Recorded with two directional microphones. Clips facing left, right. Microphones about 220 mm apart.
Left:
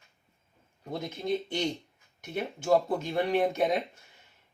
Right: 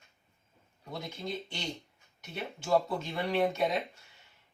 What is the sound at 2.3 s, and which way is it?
Speech, 50° left (ahead or behind).